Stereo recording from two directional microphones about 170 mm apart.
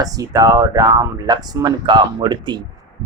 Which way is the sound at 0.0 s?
20° right (ahead or behind).